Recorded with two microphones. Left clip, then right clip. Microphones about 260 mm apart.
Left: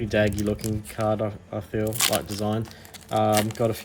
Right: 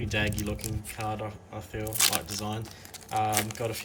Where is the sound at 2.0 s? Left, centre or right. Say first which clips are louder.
Even; centre.